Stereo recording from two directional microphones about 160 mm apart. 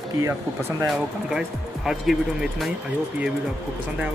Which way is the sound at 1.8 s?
Centre (ahead or behind).